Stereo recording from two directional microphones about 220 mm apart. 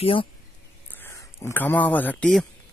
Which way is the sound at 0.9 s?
10° left (ahead or behind).